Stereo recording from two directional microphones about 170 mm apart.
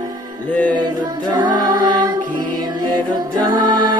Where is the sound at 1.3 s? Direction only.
25° right (ahead or behind).